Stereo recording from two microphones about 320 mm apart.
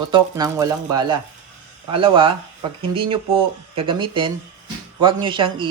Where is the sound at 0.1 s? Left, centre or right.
Centre.